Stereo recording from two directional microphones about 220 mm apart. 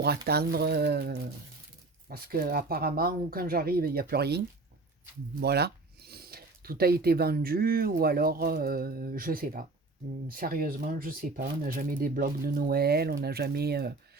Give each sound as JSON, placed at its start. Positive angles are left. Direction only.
{"t": 0.3, "sound": "speech", "side_deg": -45}